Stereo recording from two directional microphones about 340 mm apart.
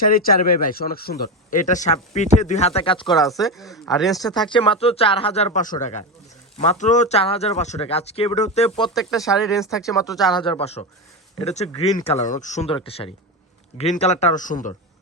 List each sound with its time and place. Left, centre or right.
0.0 s speech: left
3.1 s speech: centre
4.4 s speech: centre
9.0 s speech: centre
9.8 s speech: centre